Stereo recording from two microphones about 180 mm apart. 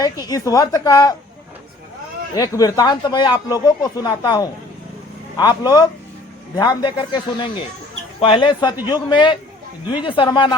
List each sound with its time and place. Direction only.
0.0 s speech: 20° left (ahead or behind)
2.3 s speech: 20° left (ahead or behind)